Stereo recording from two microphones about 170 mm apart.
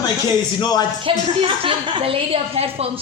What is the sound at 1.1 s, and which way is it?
A woman's voice, 30° right (ahead or behind).